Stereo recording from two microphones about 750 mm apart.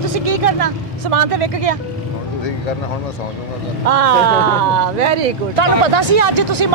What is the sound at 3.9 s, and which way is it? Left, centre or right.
Speech, right.